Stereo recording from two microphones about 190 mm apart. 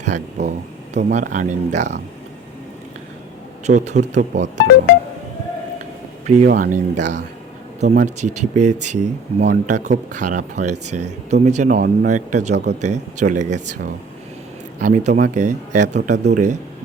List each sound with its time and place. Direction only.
0.0 s speech: 40° right (ahead or behind)
3.7 s speech: 40° right (ahead or behind)
6.2 s speech: 35° right (ahead or behind)